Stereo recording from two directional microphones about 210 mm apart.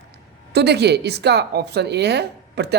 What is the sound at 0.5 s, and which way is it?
A woman's voice, 50° right (ahead or behind).